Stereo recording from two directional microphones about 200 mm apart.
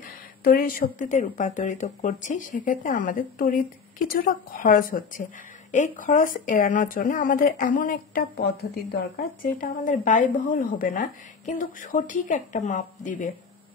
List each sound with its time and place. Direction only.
0.4 s speech: 45° left (ahead or behind)